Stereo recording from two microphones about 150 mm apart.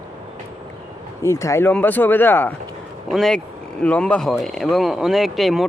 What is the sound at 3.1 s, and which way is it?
Speech, centre (ahead or behind).